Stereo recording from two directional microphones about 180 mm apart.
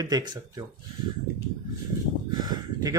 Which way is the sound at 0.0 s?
20° right (ahead or behind).